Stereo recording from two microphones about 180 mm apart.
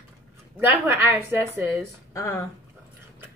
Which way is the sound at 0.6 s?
10° right (ahead or behind).